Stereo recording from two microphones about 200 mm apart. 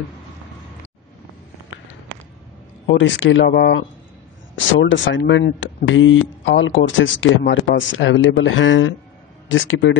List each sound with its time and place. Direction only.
2.9 s speech: 65° left (ahead or behind)
4.6 s speech: 70° left (ahead or behind)